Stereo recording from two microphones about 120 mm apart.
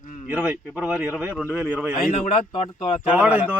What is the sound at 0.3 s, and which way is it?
Speech, 10° right (ahead or behind).